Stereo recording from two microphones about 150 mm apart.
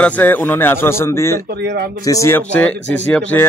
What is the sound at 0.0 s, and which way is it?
A man's voice, 10° left (ahead or behind).